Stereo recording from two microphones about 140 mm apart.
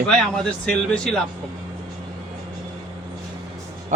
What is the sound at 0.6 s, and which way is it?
Speech, 5° left (ahead or behind).